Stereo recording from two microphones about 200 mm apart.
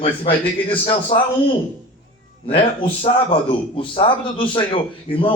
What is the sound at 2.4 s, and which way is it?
A man's voice, 25° left (ahead or behind).